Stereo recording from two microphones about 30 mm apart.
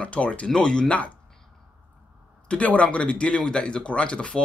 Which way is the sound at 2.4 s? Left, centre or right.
Left.